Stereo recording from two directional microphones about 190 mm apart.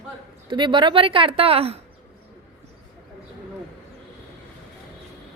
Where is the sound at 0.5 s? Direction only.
25° right (ahead or behind).